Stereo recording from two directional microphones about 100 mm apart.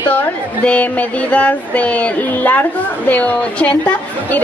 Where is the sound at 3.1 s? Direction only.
15° left (ahead or behind).